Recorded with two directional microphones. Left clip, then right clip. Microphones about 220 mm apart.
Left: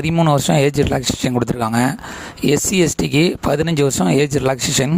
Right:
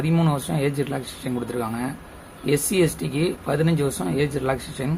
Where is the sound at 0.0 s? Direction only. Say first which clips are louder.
Left 8 dB; 45° left (ahead or behind).